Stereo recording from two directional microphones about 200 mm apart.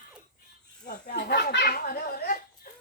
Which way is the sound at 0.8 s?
45° left (ahead or behind).